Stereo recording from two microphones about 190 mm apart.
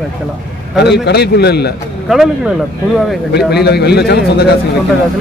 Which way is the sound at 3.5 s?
60° left (ahead or behind).